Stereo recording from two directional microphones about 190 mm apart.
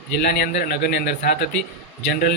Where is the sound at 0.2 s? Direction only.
55° left (ahead or behind).